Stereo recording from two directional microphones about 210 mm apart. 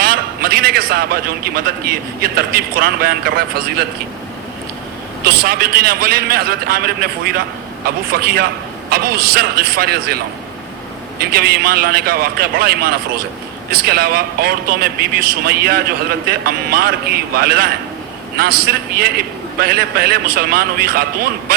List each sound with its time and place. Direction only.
0.0 s a man's voice: 45° right (ahead or behind)
5.2 s a man's voice: 45° right (ahead or behind)
11.2 s a man's voice: 45° right (ahead or behind)